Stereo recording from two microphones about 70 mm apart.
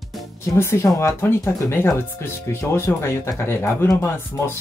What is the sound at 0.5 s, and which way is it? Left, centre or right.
Speech, left.